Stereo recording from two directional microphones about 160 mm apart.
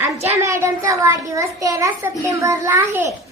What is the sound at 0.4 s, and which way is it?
A child's voice, 15° right (ahead or behind).